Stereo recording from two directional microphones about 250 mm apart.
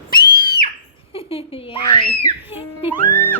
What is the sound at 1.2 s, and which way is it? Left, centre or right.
Speech, left.